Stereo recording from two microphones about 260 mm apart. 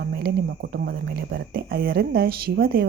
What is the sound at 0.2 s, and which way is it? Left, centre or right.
Speech, right.